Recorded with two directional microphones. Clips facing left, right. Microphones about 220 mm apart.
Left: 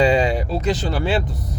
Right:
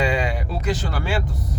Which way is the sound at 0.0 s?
25° left (ahead or behind).